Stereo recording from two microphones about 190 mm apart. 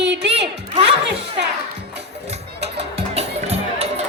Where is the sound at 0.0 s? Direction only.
65° right (ahead or behind).